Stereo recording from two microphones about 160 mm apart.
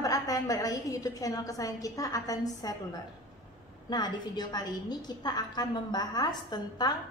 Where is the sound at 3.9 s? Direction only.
25° left (ahead or behind).